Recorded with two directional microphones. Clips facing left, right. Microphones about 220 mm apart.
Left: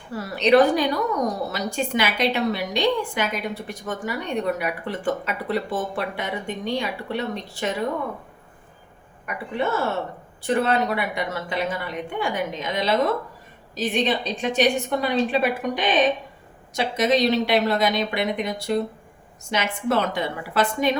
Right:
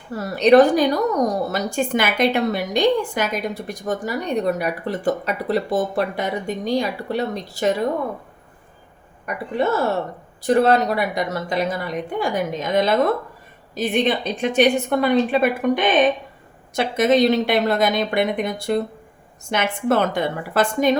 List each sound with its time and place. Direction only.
0.2 s a woman's voice: 45° right (ahead or behind)
9.2 s a woman's voice: 40° right (ahead or behind)